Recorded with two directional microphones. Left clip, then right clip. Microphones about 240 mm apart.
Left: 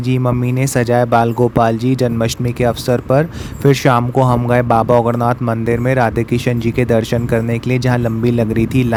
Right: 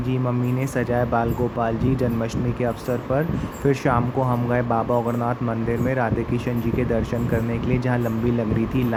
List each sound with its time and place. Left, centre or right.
0.8 s speech: left